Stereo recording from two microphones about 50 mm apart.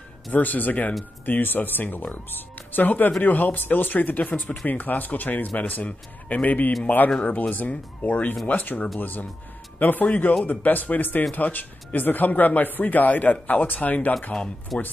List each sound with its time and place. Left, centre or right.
0.3 s speech: left
14.7 s speech: centre